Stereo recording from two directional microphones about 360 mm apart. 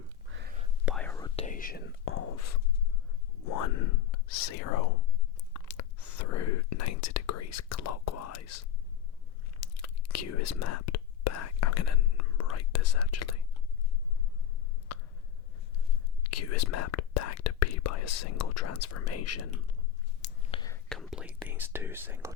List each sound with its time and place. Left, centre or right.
0.3 s whispering: right
0.9 s whispering: centre; by 2.6 s left
3.4 s speech: left
5.5 s whispering: left
14.9 s a sound: left
16.2 s speech: left
20.2 s whispering: centre